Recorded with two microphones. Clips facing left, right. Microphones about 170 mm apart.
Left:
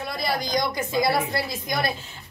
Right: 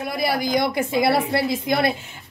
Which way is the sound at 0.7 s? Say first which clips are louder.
Right 3 dB; 25° right (ahead or behind).